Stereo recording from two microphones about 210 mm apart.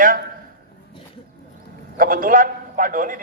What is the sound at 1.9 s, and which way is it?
A man's voice, 40° right (ahead or behind).